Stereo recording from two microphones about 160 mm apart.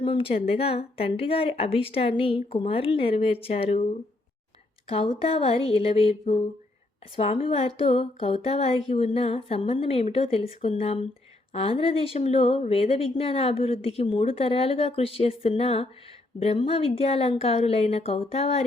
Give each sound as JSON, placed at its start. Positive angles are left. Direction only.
{"t": 0.0, "sound": "a woman's voice", "side_deg": 35}